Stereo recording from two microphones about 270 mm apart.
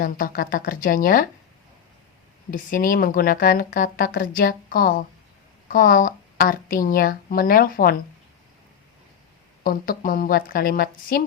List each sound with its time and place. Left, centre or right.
0.0 s a woman's voice: left
2.5 s a woman's voice: left
9.6 s a woman's voice: left